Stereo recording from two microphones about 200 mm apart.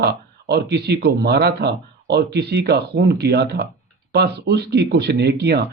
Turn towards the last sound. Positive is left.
turn(degrees=-55)  # may be behind; listen again after turning